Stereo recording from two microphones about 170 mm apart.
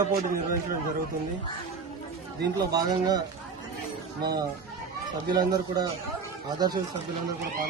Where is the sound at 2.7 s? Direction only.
25° right (ahead or behind).